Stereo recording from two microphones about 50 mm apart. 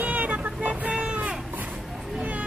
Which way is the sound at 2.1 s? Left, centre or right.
Right.